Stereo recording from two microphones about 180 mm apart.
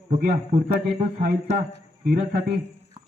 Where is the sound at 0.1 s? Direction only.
50° right (ahead or behind).